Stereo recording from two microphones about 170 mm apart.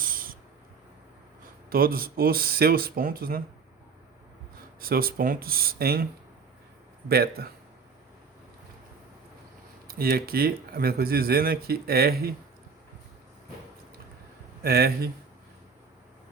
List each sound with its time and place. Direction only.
0.0 s owl: 55° right (ahead or behind)
1.7 s speech: 60° right (ahead or behind)
4.8 s speech: 60° right (ahead or behind)
7.1 s speech: 65° right (ahead or behind)
9.8 s speech: 60° right (ahead or behind)
14.6 s speech: 65° right (ahead or behind)